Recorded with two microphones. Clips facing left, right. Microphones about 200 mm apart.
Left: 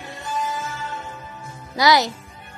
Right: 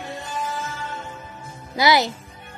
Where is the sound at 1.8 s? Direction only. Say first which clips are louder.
Left 1 dB; 25° right (ahead or behind).